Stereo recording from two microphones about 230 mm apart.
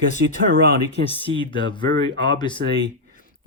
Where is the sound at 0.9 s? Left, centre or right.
Left.